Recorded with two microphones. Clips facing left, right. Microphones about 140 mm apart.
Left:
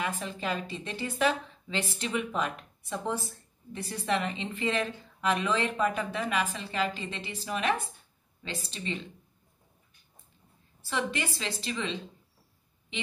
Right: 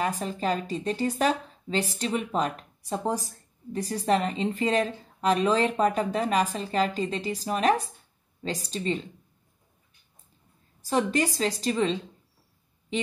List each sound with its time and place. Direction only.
0.0 s speech: 40° right (ahead or behind)
10.8 s speech: 40° right (ahead or behind)